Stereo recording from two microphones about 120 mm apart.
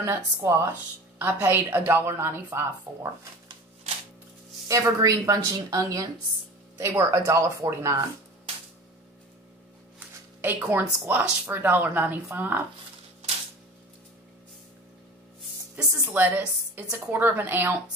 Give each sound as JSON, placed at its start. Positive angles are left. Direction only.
{"t": 0.0, "sound": "a woman's voice", "side_deg": -25}
{"t": 4.6, "sound": "a woman's voice", "side_deg": -25}
{"t": 9.9, "sound": "speech", "side_deg": -15}
{"t": 15.7, "sound": "speech", "side_deg": -15}